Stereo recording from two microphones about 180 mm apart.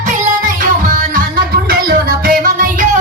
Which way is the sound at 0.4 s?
50° right (ahead or behind).